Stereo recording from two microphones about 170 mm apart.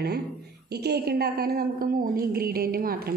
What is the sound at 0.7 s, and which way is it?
Speech, 70° right (ahead or behind).